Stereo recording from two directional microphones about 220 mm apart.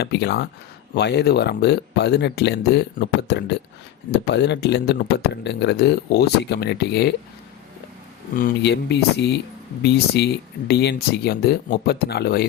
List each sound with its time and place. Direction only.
0.0 s speech: 50° left (ahead or behind)
8.4 s speech: 45° left (ahead or behind)
10.7 s speech: 50° left (ahead or behind)